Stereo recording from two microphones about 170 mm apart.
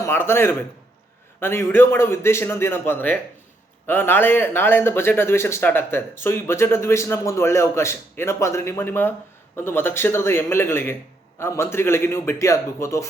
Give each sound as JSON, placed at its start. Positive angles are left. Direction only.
{"t": 0.0, "sound": "speech", "side_deg": 15}